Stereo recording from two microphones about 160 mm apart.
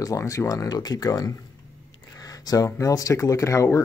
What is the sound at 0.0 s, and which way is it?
Speech, 20° left (ahead or behind).